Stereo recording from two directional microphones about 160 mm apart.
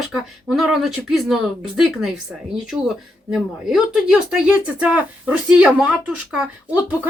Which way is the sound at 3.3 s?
5° right (ahead or behind).